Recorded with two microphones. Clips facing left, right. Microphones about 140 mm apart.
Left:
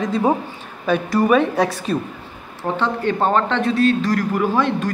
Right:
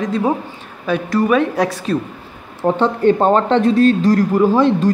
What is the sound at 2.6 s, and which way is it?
Speech, 35° right (ahead or behind).